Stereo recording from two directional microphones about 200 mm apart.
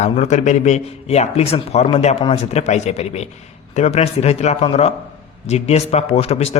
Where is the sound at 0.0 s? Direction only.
35° left (ahead or behind).